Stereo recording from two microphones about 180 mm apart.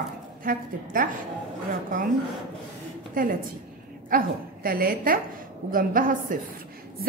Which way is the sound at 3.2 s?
50° right (ahead or behind).